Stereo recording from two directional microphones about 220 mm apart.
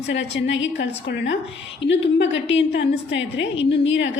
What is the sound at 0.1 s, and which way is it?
A woman's voice, 55° left (ahead or behind).